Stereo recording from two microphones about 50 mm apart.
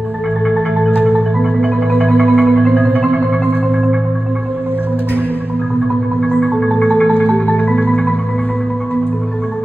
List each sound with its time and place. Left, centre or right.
1.4 s marimba: right
6.8 s marimba: left